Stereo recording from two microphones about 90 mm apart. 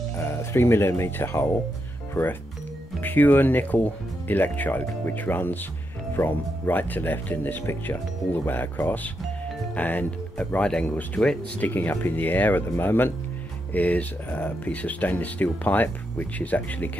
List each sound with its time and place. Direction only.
0.2 s speech: 30° left (ahead or behind); by 11.3 s 10° left (ahead or behind)
11.6 s speech: 20° left (ahead or behind)